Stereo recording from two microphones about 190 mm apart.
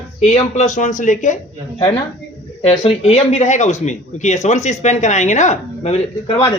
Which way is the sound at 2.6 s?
30° left (ahead or behind).